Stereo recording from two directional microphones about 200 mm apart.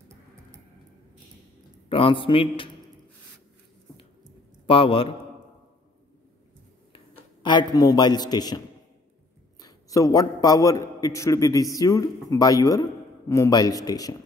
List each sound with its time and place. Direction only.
1.9 s a man's voice: 25° left (ahead or behind)
4.6 s a man's voice: 25° left (ahead or behind)
7.4 s a man's voice: 20° left (ahead or behind)